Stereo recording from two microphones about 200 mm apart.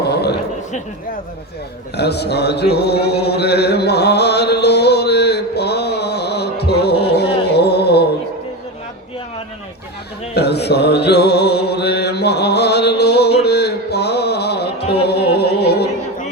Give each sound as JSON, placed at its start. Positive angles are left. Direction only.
{"t": 0.1, "sound": "a sound", "side_deg": 55}
{"t": 2.0, "sound": "chant", "side_deg": 55}
{"t": 10.3, "sound": "mantra", "side_deg": 55}
{"t": 15.0, "sound": "music", "side_deg": 55}